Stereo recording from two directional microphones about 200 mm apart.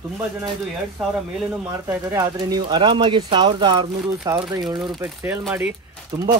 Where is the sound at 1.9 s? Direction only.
15° right (ahead or behind).